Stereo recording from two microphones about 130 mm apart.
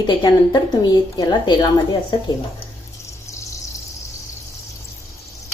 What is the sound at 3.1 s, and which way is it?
Water, 20° left (ahead or behind).